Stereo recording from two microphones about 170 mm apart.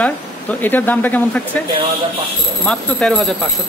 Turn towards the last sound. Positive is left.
turn(degrees=5)  # may be behind; listen again after turning